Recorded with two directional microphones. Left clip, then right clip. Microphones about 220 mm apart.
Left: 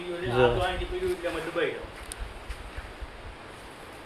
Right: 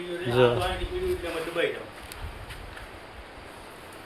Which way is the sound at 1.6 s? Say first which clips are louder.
Right 2 dB; 30° right (ahead or behind).